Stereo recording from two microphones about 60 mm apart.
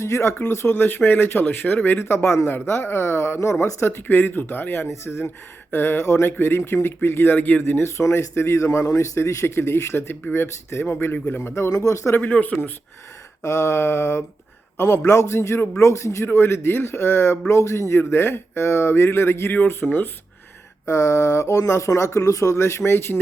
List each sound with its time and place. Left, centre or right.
0.0 s speech: left
2.5 s speech: left
4.9 s speech: left
7.6 s speech: left
11.7 s speech: left
12.1 s speech: left
13.4 s speech: left
16.2 s speech: left
20.8 s speech: left